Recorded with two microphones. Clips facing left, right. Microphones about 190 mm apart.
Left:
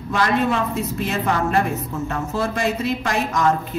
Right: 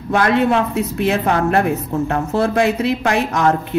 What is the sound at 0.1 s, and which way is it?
A woman's voice, 60° right (ahead or behind).